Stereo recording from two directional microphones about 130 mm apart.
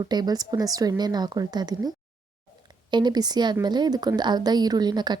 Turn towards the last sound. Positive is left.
turn(degrees=-35)  # may be behind; listen again after turning